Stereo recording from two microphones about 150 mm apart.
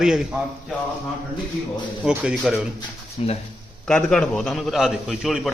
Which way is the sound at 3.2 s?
45° left (ahead or behind).